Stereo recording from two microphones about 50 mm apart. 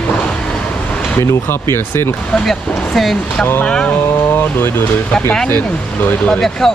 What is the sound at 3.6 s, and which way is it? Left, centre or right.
Speech, centre.